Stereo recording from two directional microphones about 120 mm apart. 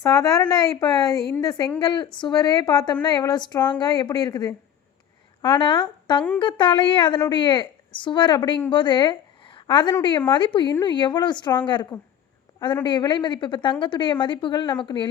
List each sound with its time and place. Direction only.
0.0 s a woman's voice: 30° left (ahead or behind)